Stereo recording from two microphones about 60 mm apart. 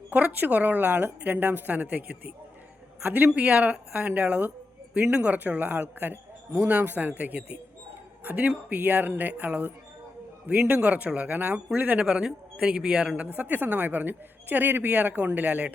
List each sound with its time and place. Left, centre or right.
0.1 s a man's voice: right
4.9 s a man's voice: centre
11.9 s a man's voice: centre; by 15.7 s right